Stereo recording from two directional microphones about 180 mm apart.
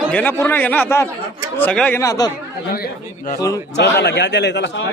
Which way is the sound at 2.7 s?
55° left (ahead or behind).